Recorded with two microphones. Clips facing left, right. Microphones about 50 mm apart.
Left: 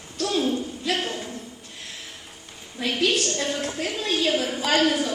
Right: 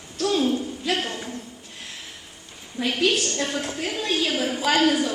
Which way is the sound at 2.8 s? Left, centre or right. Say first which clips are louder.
Right 1 dB; centre.